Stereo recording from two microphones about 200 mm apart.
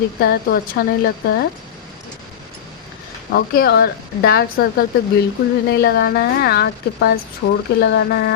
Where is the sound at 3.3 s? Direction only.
50° left (ahead or behind).